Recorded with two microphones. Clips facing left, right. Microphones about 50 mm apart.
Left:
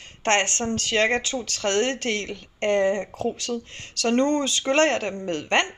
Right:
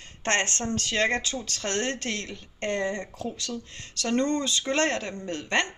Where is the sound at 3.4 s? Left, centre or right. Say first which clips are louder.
Left 5 dB; left.